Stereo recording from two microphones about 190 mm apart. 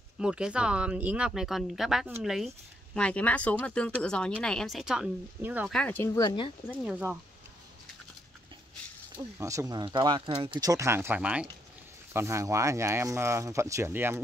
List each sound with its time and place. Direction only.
0.2 s speech: 5° right (ahead or behind)
5.7 s speech: 5° left (ahead or behind)
6.2 s speech: 25° left (ahead or behind)
6.7 s speech: 5° right (ahead or behind)
9.1 s speech: 15° right (ahead or behind)